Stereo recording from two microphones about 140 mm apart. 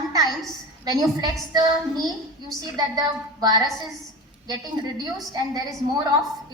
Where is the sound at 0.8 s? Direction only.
25° right (ahead or behind).